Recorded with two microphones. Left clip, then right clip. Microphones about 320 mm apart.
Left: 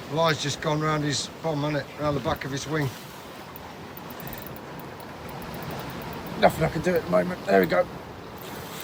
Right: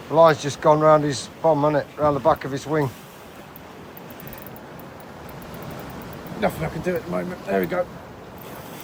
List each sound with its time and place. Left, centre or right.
0.2 s speech: centre
6.4 s speech: left